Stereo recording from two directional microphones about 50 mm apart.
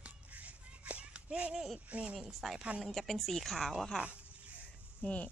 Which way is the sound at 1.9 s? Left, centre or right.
Right.